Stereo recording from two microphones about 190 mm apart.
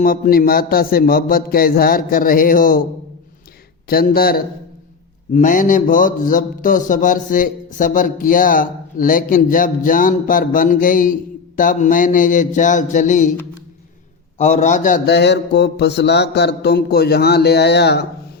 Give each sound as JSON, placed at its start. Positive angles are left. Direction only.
{"t": 0.0, "sound": "a man's voice", "side_deg": 50}
{"t": 3.8, "sound": "a man's voice", "side_deg": 50}
{"t": 14.3, "sound": "a man's voice", "side_deg": 40}
{"t": 15.1, "sound": "a sound", "side_deg": 65}